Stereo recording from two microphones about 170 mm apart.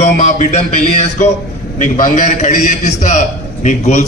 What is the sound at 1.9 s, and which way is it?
A man's voice, 45° left (ahead or behind).